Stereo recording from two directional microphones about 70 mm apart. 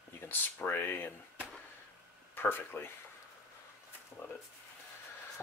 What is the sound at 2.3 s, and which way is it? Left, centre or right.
Speech, left.